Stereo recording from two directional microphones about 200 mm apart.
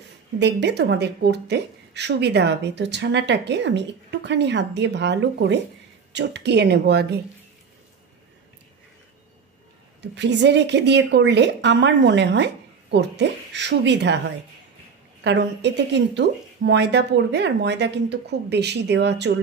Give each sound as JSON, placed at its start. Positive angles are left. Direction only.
{"t": 0.4, "sound": "a woman's voice", "side_deg": -60}
{"t": 10.1, "sound": "a woman's voice", "side_deg": -60}
{"t": 15.2, "sound": "a woman's voice", "side_deg": -60}